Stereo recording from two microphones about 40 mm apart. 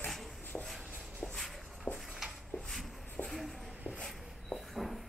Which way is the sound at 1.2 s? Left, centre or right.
Centre.